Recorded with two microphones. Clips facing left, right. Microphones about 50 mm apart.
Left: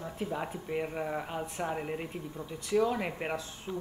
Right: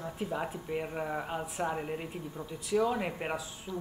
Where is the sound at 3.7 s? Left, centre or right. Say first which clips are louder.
Left 1 dB; left.